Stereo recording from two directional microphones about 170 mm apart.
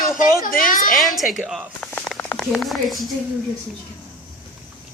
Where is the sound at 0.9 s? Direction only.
Centre (ahead or behind).